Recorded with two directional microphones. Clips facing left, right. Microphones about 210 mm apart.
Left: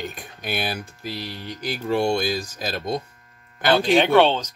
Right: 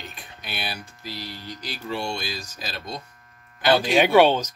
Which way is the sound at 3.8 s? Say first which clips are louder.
Left 1 dB; 10° right (ahead or behind).